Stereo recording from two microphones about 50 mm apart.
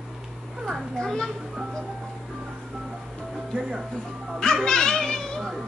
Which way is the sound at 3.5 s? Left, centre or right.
Right.